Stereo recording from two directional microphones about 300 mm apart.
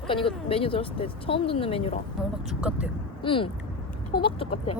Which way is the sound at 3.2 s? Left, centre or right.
Centre.